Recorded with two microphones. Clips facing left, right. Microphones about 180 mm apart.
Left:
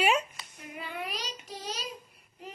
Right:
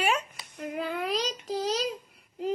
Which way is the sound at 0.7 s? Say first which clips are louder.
Right 8 dB; 90° right.